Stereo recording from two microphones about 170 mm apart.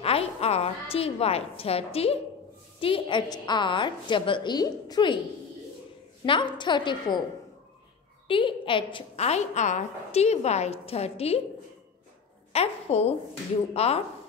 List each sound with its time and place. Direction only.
0.0 s a woman's voice: 35° left (ahead or behind)
6.2 s a woman's voice: 30° left (ahead or behind)
8.3 s a woman's voice: 30° left (ahead or behind)
12.5 s a woman's voice: 35° left (ahead or behind)